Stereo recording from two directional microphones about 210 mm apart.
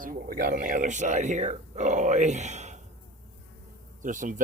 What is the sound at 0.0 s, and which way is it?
Speech, 45° right (ahead or behind).